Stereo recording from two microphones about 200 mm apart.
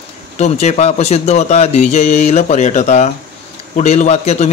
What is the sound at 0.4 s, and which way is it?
A man's voice, 35° left (ahead or behind).